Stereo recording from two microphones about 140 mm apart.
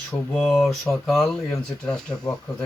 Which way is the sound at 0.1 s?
5° left (ahead or behind).